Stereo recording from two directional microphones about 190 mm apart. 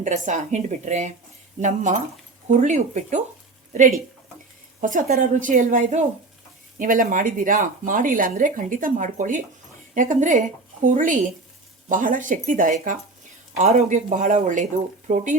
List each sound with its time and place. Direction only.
0.0 s a woman's voice: 40° right (ahead or behind)